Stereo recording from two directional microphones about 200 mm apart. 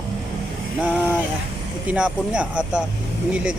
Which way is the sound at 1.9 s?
5° right (ahead or behind).